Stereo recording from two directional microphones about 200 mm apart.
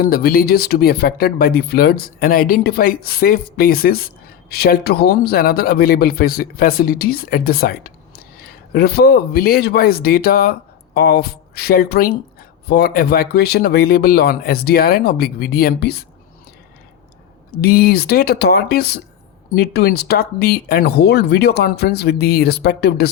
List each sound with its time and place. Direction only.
0.0 s speech: 50° left (ahead or behind)
17.5 s speech: 50° left (ahead or behind)